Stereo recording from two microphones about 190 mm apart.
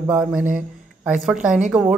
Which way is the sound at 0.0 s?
5° right (ahead or behind).